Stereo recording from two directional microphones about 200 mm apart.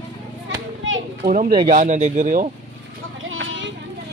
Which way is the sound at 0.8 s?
70° right (ahead or behind).